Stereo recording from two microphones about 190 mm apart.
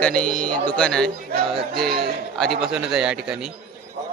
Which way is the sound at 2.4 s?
Centre (ahead or behind).